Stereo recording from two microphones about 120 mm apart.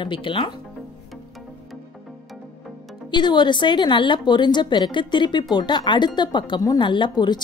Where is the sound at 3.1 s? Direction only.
40° left (ahead or behind).